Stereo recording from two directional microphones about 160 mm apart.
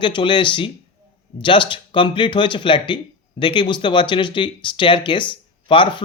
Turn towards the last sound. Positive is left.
turn(degrees=30)  # may be behind; listen again after turning